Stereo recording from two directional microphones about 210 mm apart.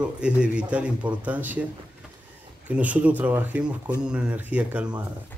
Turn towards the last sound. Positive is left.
turn(degrees=-5)  # may be behind; listen again after turning